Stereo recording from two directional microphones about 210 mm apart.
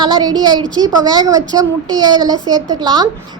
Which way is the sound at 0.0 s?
20° right (ahead or behind).